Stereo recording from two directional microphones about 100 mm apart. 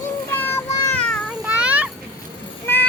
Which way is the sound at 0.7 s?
35° left (ahead or behind).